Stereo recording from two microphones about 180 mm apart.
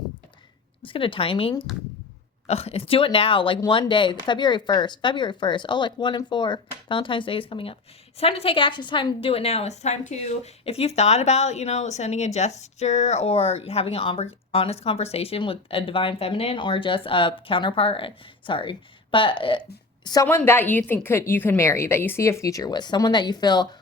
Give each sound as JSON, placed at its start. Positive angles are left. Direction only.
{"t": 0.8, "sound": "a woman's voice", "side_deg": 30}
{"t": 20.2, "sound": "speech", "side_deg": 15}